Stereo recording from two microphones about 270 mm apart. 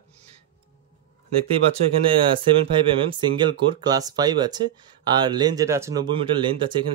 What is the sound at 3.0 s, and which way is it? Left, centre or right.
Speech, centre.